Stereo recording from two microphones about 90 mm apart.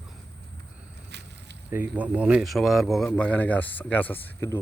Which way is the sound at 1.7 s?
20° right (ahead or behind).